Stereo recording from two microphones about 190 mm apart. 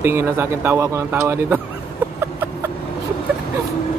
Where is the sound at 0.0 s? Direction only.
10° right (ahead or behind).